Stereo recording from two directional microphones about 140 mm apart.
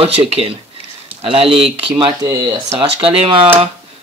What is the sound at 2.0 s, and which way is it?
Speech, 30° right (ahead or behind).